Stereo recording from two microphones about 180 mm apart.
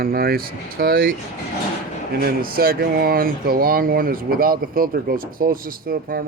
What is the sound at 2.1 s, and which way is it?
Speech, 55° right (ahead or behind).